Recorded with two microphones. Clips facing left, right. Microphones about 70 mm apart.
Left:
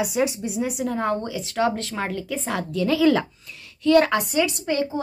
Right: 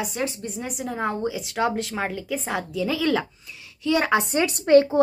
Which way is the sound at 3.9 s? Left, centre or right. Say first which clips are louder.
Left 5 dB; centre.